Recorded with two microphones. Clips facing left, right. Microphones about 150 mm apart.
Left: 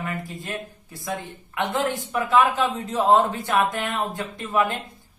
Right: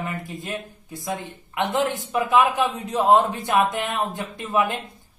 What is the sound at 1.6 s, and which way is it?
A man's voice, 20° right (ahead or behind).